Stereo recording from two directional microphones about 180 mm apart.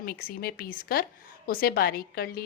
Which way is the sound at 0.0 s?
55° left (ahead or behind).